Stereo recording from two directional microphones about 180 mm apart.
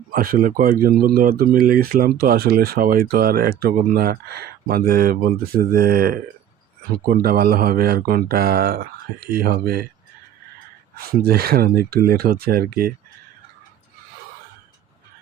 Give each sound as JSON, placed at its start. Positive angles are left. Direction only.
{"t": 0.1, "sound": "speech", "side_deg": -55}
{"t": 10.9, "sound": "speech", "side_deg": -60}